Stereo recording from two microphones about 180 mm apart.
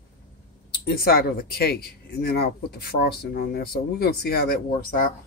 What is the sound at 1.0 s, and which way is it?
Speech, 55° left (ahead or behind).